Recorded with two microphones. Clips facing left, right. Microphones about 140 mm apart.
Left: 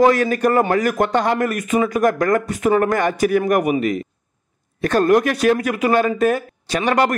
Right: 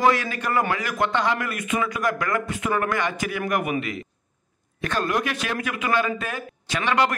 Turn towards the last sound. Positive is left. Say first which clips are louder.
# left 5 dB
turn(degrees=45)  # may be behind; listen again after turning